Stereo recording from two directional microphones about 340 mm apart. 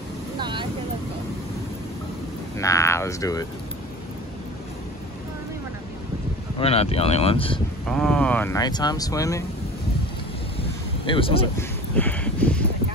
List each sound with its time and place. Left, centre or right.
0.4 s vehicle: centre
2.6 s speech: centre
6.6 s speech: centre
7.9 s speech: centre
11.1 s speech: centre
12.0 s a sound: centre